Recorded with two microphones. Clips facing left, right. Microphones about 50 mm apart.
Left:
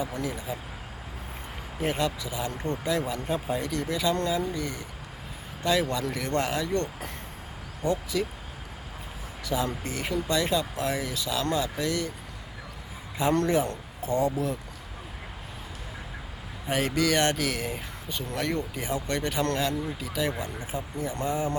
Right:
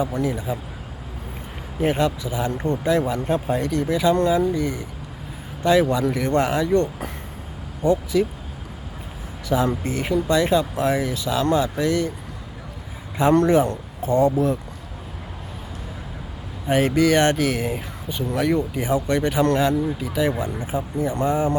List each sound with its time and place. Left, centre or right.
0.0 s speech: right
1.8 s speech: right
3.1 s speech: right
3.7 s speech: right
8.1 s speech: right
9.5 s speech: right
13.1 s speech: right
16.6 s speech: right
18.3 s speech: centre; by 21.5 s right